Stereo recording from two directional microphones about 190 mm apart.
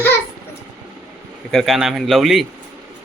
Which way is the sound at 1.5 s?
Centre (ahead or behind).